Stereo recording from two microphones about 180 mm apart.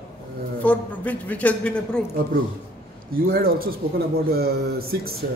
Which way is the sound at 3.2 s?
55° right (ahead or behind).